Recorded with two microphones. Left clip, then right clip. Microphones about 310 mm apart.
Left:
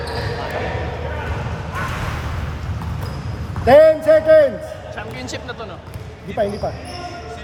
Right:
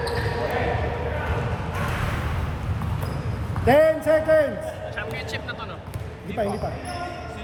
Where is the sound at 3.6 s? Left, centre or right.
Left.